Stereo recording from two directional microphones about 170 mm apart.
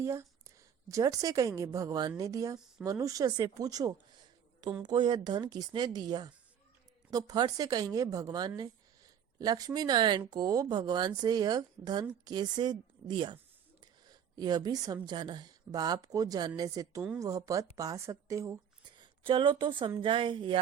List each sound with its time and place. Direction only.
0.0 s speech: 15° right (ahead or behind)